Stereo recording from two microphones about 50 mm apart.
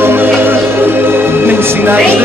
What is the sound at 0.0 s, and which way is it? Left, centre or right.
Music, right.